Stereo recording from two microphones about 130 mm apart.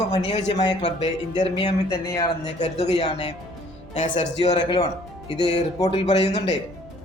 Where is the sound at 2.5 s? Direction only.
60° left (ahead or behind).